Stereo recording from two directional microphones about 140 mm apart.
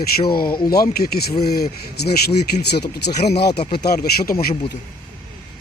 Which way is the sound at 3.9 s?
90° left.